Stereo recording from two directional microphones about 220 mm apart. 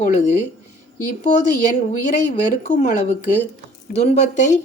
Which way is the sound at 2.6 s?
35° left (ahead or behind).